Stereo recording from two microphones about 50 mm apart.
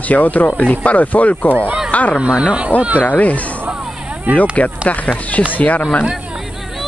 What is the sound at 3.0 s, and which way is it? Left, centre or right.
Speech, left.